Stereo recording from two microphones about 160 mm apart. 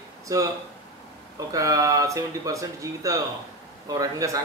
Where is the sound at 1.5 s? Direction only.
20° right (ahead or behind).